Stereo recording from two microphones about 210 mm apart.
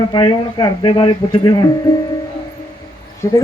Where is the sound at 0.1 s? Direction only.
20° left (ahead or behind).